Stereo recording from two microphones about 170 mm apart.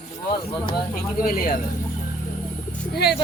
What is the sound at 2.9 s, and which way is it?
Speech, 70° left (ahead or behind).